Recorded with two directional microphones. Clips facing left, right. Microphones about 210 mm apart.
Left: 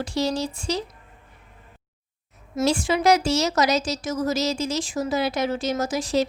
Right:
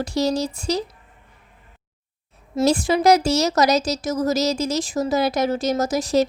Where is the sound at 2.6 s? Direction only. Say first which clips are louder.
Right 3 dB; 40° right (ahead or behind).